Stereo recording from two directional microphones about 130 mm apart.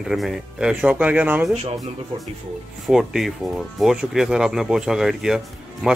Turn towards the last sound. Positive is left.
turn(degrees=0)  # may be behind; listen again after turning